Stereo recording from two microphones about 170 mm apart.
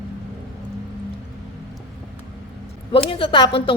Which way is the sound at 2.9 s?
30° left (ahead or behind).